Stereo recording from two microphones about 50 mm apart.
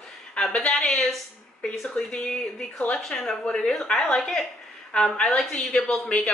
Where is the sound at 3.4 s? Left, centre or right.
Centre.